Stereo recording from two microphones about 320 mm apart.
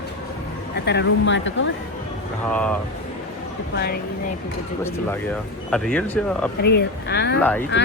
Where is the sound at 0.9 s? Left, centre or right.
Left.